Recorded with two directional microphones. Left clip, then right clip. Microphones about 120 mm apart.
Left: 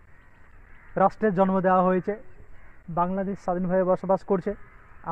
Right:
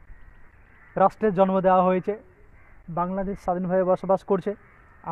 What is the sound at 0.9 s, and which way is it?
Speech, 20° right (ahead or behind).